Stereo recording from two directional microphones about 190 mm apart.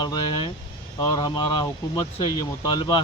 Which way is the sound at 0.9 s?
25° left (ahead or behind).